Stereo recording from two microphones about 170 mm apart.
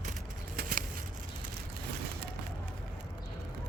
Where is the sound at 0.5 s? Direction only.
55° right (ahead or behind).